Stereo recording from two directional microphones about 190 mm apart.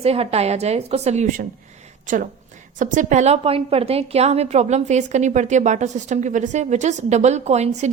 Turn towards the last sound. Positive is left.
turn(degrees=-35)  # may be behind; listen again after turning